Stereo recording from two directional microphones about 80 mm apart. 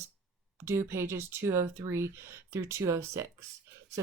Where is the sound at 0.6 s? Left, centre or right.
Right.